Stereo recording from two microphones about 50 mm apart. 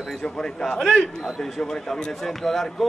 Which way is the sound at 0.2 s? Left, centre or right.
Centre.